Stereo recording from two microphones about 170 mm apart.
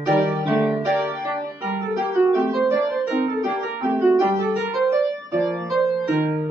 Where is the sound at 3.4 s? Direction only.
15° right (ahead or behind).